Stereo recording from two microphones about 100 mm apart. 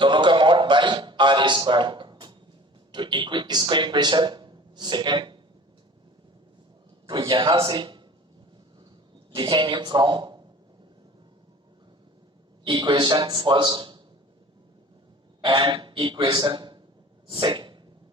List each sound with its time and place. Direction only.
0.0 s a sound: 55° right (ahead or behind)
2.9 s a man's voice: 50° right (ahead or behind)
7.1 s a man's voice: 50° right (ahead or behind)
9.3 s a man's voice: 50° right (ahead or behind)
12.6 s a man's voice: 50° right (ahead or behind)
15.4 s a sound: 50° right (ahead or behind)
15.7 s speech: 55° right (ahead or behind)
17.2 s sneeze: 55° right (ahead or behind)